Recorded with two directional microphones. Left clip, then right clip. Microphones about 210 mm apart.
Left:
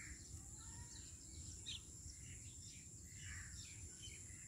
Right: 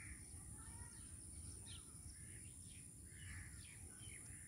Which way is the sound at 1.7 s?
20° right (ahead or behind).